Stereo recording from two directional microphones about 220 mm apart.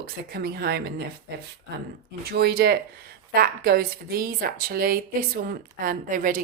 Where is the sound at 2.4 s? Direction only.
45° right (ahead or behind).